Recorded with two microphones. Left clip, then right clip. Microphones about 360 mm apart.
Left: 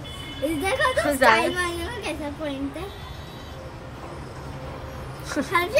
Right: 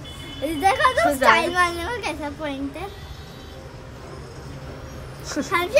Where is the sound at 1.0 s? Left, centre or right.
Centre.